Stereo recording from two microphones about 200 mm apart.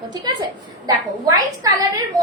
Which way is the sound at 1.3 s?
20° right (ahead or behind).